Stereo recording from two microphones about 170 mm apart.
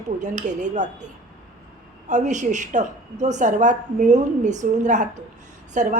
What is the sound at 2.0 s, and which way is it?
A woman's voice, 45° right (ahead or behind).